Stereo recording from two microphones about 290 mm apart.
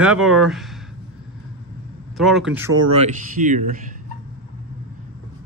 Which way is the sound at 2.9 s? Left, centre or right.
Right.